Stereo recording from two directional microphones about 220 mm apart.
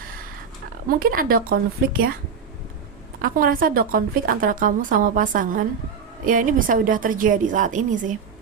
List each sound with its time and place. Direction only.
0.9 s a woman's voice: 40° right (ahead or behind)
3.2 s a woman's voice: 40° right (ahead or behind)